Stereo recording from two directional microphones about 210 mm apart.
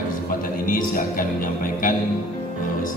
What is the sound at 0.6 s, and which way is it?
Music, 40° left (ahead or behind).